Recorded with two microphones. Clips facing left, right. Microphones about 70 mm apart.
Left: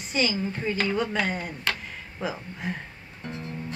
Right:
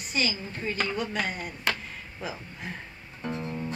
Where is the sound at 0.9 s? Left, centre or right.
Left.